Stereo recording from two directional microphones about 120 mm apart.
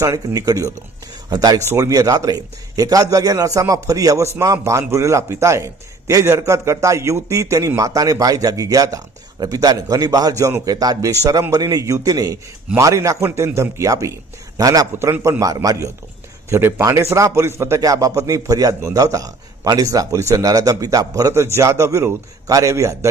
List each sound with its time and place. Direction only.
0.0 s a man's voice: 30° right (ahead or behind)